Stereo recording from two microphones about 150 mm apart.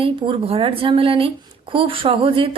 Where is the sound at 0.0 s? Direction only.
40° right (ahead or behind).